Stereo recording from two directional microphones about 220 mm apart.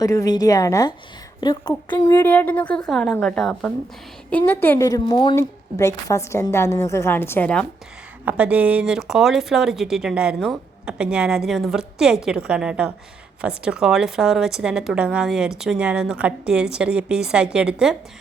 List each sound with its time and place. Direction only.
0.0 s a woman's voice: 15° left (ahead or behind)
2.1 s a woman's voice: 10° left (ahead or behind)
8.2 s speech: 5° right (ahead or behind)